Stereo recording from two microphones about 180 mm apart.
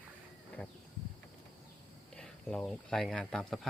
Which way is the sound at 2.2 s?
5° left (ahead or behind).